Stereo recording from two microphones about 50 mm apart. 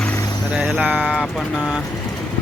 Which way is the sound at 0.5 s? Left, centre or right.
Centre.